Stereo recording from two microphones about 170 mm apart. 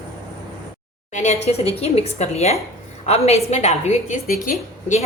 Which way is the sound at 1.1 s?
40° left (ahead or behind).